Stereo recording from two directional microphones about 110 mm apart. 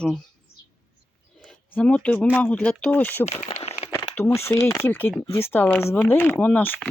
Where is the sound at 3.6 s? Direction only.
75° left (ahead or behind).